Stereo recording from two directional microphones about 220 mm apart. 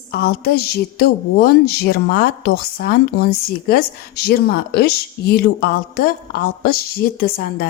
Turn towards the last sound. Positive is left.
turn(degrees=45)  # may be behind; listen again after turning